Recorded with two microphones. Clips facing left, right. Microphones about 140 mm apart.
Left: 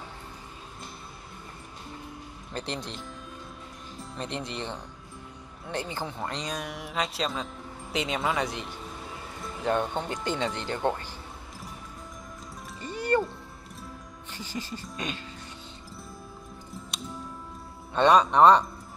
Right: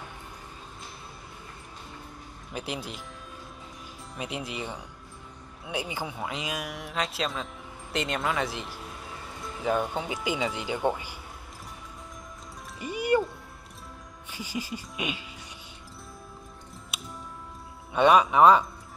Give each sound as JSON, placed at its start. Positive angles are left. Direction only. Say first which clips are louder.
{"t": 2.5, "sound": "speech", "louder": "even", "side_deg": -5}
{"t": 4.1, "sound": "speech", "louder": "even", "side_deg": -5}
{"t": 12.8, "sound": "music", "louder": "right 1 dB", "side_deg": -10}
{"t": 14.3, "sound": "speech", "louder": "right 2 dB", "side_deg": -10}
{"t": 16.7, "sound": "music", "louder": "left 4 dB", "side_deg": 0}
{"t": 17.9, "sound": "speech", "louder": "even", "side_deg": -5}